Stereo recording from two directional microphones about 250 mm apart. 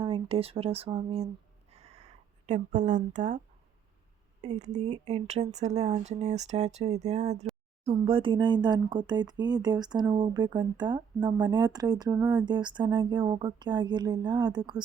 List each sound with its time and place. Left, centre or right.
0.0 s speech: right
1.7 s a sound: right
4.4 s speech: right